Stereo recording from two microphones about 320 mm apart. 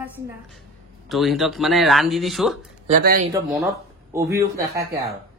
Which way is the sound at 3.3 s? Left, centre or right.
Centre.